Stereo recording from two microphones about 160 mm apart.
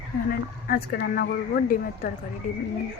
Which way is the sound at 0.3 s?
65° left (ahead or behind).